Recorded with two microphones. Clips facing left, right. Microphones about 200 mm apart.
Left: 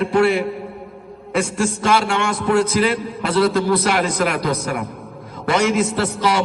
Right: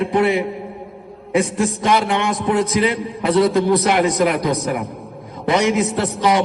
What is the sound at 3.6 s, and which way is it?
A man's voice, 20° right (ahead or behind).